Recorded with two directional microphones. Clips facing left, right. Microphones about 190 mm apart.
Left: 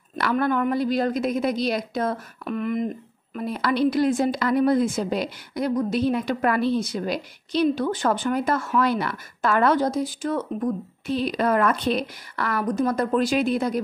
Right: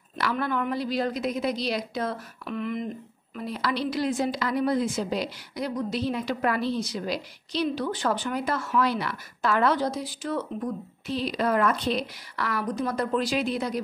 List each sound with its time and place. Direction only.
0.2 s a woman's voice: 50° left (ahead or behind)